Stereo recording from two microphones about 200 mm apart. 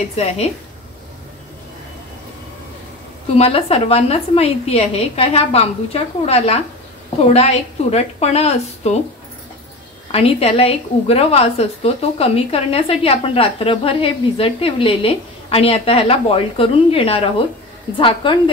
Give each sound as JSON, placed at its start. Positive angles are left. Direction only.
{"t": 0.1, "sound": "a woman's voice", "side_deg": 30}
{"t": 3.3, "sound": "a woman's voice", "side_deg": 30}
{"t": 10.1, "sound": "a woman's voice", "side_deg": 30}